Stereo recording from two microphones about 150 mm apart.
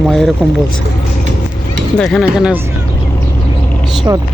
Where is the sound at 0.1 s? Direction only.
Centre (ahead or behind).